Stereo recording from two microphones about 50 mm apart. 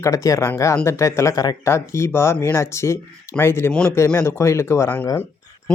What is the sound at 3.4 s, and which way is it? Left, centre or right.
Speech, left.